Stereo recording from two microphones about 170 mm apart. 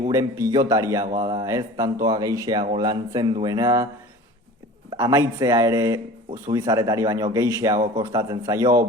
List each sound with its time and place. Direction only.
0.1 s a man's voice: 20° right (ahead or behind)
4.9 s a man's voice: 20° right (ahead or behind)